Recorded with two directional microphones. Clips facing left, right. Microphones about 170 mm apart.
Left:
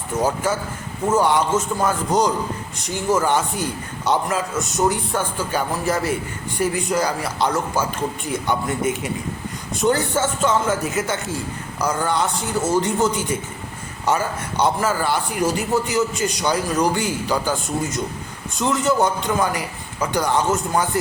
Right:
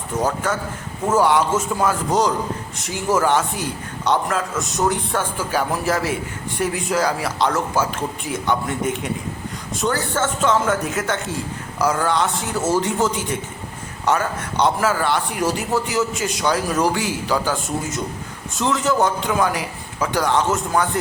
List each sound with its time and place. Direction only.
0.2 s speech: 5° left (ahead or behind)
1.0 s a man's voice: 5° right (ahead or behind)
9.8 s speech: 15° left (ahead or behind)
10.4 s a man's voice: centre (ahead or behind)
18.5 s a man's voice: centre (ahead or behind)